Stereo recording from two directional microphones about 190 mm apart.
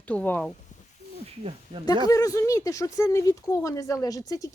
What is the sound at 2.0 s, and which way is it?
Speech, 20° left (ahead or behind).